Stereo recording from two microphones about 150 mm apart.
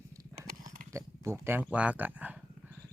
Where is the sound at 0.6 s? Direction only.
20° right (ahead or behind).